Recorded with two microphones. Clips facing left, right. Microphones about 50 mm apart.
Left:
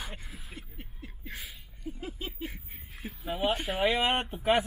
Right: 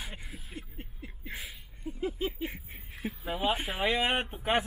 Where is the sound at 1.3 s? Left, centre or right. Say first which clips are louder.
Right 2 dB; centre.